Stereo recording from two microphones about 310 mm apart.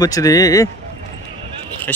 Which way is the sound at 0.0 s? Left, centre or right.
Centre.